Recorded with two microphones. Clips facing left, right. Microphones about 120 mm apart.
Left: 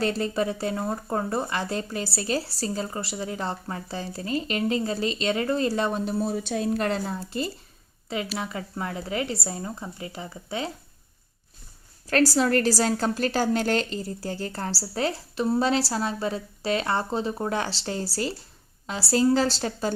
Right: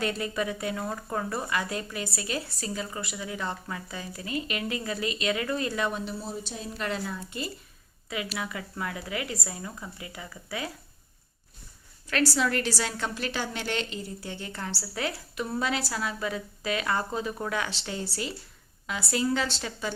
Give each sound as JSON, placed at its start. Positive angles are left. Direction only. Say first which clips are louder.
{"t": 0.0, "sound": "a woman's voice", "louder": "left 4 dB", "side_deg": 30}
{"t": 6.1, "sound": "speech", "louder": "left 10 dB", "side_deg": 60}
{"t": 6.7, "sound": "a woman's voice", "louder": "left 6 dB", "side_deg": 40}
{"t": 12.0, "sound": "a woman's voice", "louder": "left 5 dB", "side_deg": 40}